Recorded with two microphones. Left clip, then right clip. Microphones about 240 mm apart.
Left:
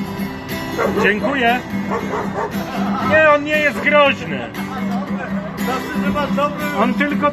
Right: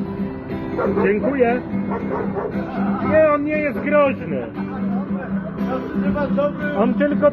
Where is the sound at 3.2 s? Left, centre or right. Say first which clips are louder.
Left 4 dB; left.